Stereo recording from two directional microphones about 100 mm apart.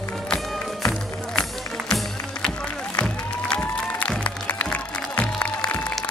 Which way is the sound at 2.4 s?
10° left (ahead or behind).